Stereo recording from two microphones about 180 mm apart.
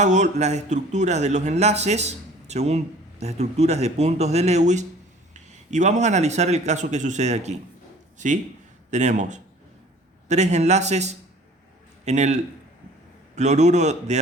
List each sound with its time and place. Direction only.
0.0 s a man's voice: 40° right (ahead or behind)
8.9 s a man's voice: 40° right (ahead or behind)